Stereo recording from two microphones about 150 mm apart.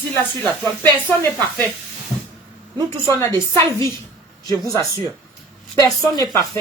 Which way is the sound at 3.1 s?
20° left (ahead or behind).